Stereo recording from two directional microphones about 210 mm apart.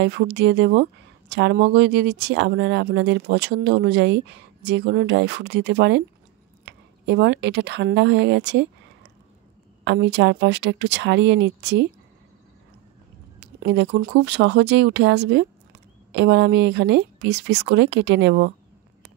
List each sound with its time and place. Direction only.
0.0 s a woman's voice: 55° right (ahead or behind)
13.6 s speech: 50° right (ahead or behind)